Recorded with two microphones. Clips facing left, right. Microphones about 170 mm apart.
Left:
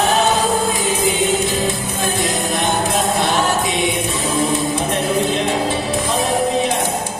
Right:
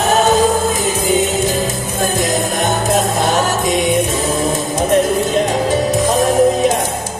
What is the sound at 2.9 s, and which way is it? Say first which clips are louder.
Music: right 3 dB; 45° right (ahead or behind).